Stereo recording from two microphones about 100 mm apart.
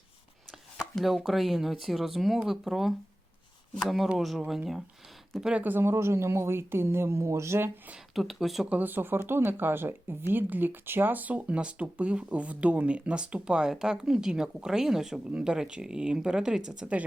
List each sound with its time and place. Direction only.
0.8 s speech: centre (ahead or behind); by 7.7 s 25° right (ahead or behind)
8.1 s speech: centre (ahead or behind)
8.7 s speech: 20° right (ahead or behind)